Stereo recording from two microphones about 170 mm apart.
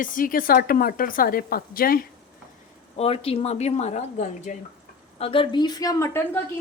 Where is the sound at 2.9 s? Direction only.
35° left (ahead or behind).